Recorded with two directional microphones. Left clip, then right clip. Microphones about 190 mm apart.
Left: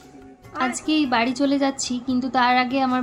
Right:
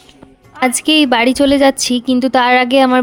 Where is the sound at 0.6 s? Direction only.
55° right (ahead or behind).